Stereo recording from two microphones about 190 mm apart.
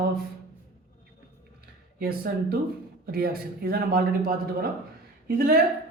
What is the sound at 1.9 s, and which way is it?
Speech, 55° right (ahead or behind).